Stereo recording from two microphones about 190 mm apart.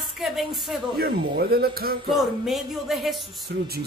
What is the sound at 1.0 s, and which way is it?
Speech, 55° right (ahead or behind).